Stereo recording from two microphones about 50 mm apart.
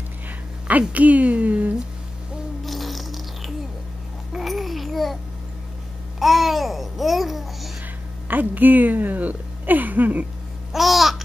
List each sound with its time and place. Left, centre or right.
0.7 s a woman's voice: right
2.6 s a sound: centre
4.3 s babbling: centre
8.3 s speech: right
10.7 s babbling: centre